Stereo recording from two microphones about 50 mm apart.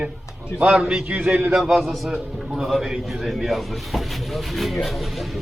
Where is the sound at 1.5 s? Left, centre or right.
Centre.